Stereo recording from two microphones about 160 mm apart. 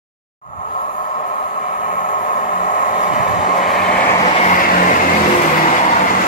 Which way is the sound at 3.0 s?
50° left (ahead or behind).